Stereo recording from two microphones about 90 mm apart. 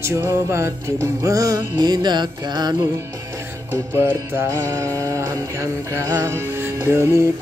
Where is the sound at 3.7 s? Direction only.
30° right (ahead or behind).